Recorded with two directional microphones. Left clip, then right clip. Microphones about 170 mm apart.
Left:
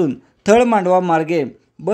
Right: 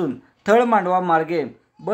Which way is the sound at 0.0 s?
40° left (ahead or behind).